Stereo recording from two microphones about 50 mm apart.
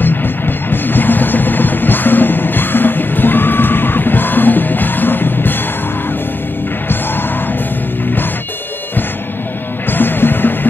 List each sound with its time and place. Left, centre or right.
0.0 s music: left
9.8 s music: left